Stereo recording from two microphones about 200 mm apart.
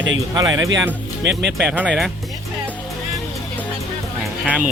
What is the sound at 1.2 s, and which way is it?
Speech, 60° right (ahead or behind).